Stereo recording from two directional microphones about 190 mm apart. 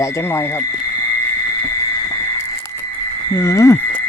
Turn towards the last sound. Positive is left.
turn(degrees=15)  # may be behind; listen again after turning